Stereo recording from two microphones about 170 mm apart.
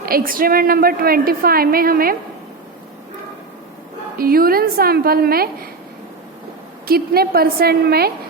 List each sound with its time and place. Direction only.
0.0 s a woman's voice: 60° right (ahead or behind)
4.2 s a woman's voice: 60° right (ahead or behind)
6.8 s a woman's voice: 65° right (ahead or behind)